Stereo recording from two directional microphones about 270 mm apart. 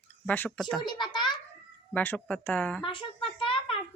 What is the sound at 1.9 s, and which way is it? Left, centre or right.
Speech, centre.